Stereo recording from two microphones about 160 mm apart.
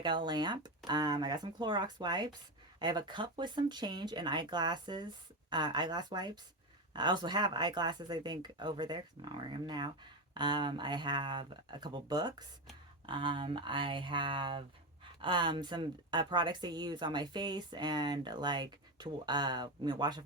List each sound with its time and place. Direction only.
0.0 s speech: 30° right (ahead or behind)